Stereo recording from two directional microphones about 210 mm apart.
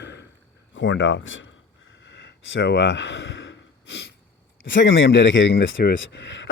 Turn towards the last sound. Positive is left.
turn(degrees=60)  # may be behind; listen again after turning